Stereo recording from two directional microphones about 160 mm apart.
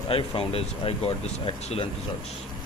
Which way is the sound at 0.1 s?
35° left (ahead or behind).